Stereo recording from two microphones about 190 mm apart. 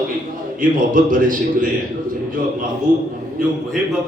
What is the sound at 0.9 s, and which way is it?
Speech, 45° right (ahead or behind).